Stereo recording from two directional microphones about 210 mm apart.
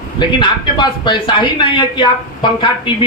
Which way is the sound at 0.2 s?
20° left (ahead or behind).